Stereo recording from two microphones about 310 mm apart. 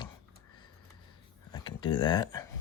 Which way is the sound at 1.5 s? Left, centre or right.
Centre.